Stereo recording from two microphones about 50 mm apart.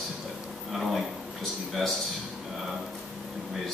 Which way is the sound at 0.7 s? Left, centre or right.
Centre.